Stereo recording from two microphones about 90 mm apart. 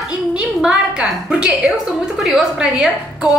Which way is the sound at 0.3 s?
10° right (ahead or behind).